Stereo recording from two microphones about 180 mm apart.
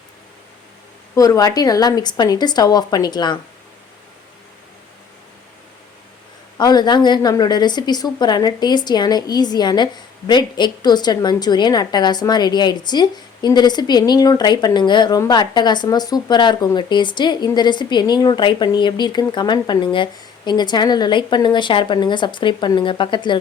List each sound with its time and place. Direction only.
1.1 s a woman's voice: 20° left (ahead or behind)
6.6 s a woman's voice: 20° left (ahead or behind)